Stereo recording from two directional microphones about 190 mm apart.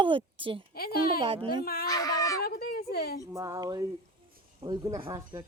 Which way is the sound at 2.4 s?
55° left (ahead or behind).